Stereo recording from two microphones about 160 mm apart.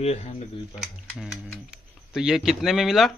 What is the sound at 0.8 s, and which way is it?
Speech, centre (ahead or behind).